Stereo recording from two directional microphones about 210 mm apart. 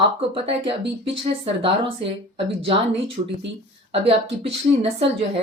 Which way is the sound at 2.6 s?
25° right (ahead or behind).